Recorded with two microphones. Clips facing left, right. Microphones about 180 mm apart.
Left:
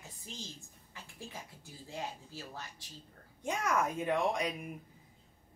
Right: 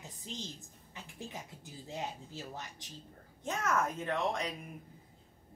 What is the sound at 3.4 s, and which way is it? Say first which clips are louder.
Speech: left 1 dB; 10° left (ahead or behind).